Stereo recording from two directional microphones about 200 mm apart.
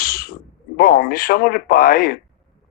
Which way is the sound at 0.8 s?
45° left (ahead or behind).